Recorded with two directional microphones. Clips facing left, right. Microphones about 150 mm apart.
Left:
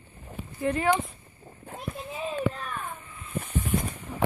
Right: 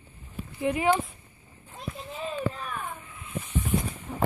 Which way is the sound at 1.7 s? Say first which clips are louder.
Left 1 dB; centre (ahead or behind).